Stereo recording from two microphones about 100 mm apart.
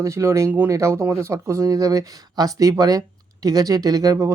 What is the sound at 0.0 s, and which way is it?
Speech, 30° right (ahead or behind).